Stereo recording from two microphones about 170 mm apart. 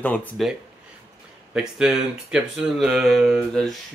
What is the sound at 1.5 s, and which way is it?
Speech, 5° right (ahead or behind).